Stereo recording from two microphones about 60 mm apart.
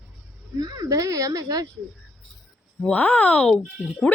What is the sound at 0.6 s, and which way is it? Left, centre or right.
Speech, right.